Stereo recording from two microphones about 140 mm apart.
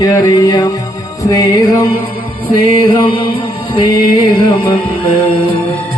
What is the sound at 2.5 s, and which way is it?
Music, 35° left (ahead or behind).